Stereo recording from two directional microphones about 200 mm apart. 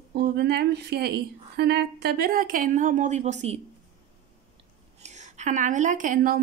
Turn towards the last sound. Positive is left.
turn(degrees=-45)  # may be behind; listen again after turning